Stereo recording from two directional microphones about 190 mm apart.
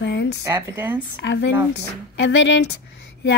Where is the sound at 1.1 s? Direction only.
65° left (ahead or behind).